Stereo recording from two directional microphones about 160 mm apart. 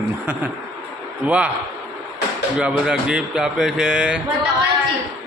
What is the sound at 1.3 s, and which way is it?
Speech, 10° right (ahead or behind).